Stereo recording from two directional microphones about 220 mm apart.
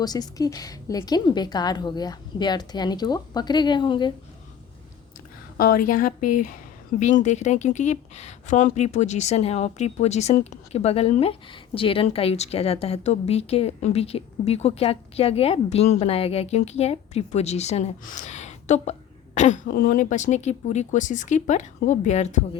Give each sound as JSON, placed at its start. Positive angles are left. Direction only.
{"t": 0.0, "sound": "speech", "side_deg": 15}
{"t": 5.5, "sound": "speech", "side_deg": 40}